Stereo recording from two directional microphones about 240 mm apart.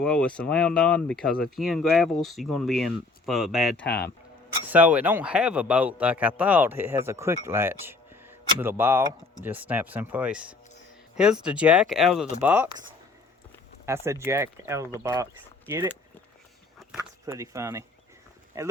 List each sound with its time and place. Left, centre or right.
0.0 s speech: centre
3.8 s speech: left
4.6 s a man's voice: centre
13.8 s a man's voice: centre
17.0 s a man's voice: centre